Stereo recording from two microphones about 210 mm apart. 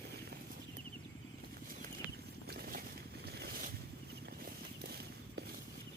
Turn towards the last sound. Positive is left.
turn(degrees=-45)  # may be behind; listen again after turning